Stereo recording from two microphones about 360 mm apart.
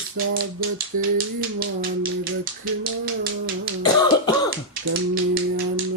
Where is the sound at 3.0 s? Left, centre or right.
Right.